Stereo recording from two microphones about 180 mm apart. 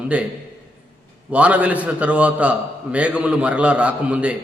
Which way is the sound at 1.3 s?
10° right (ahead or behind).